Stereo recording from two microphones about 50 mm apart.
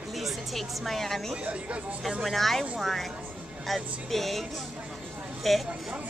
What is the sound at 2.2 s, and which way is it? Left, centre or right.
Speech, centre.